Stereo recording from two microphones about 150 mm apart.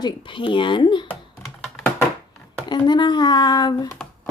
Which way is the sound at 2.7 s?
30° left (ahead or behind).